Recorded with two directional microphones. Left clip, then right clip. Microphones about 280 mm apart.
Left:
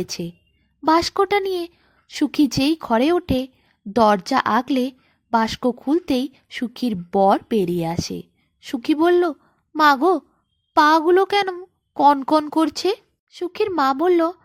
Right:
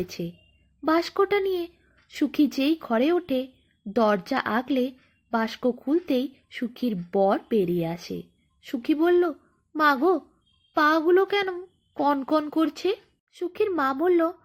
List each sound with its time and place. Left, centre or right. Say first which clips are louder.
0.0 s speech: left 4 dB; left